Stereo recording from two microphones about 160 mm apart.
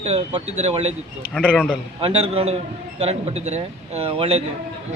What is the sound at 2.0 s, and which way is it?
A man's voice, 35° right (ahead or behind).